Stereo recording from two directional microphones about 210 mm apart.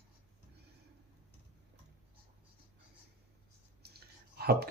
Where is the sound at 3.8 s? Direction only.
50° right (ahead or behind).